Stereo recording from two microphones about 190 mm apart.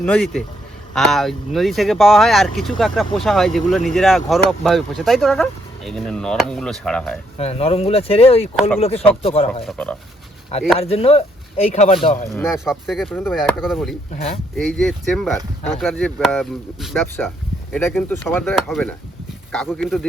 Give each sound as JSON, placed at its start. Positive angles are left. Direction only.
{"t": 0.0, "sound": "speech", "side_deg": 5}
{"t": 7.3, "sound": "speech", "side_deg": 30}
{"t": 9.6, "sound": "speech", "side_deg": 5}
{"t": 10.8, "sound": "speech", "side_deg": 30}
{"t": 12.5, "sound": "speech", "side_deg": 0}